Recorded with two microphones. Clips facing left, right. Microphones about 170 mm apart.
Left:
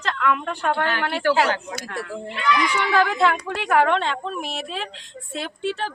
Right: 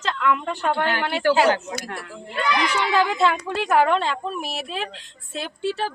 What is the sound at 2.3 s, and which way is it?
Speech, 35° right (ahead or behind).